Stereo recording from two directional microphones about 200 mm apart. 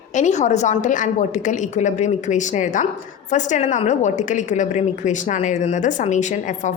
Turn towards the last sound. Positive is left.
turn(degrees=40)  # may be behind; listen again after turning